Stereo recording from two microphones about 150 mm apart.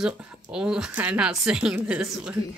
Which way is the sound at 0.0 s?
5° right (ahead or behind).